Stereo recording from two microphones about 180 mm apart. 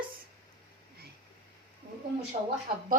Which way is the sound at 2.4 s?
30° right (ahead or behind).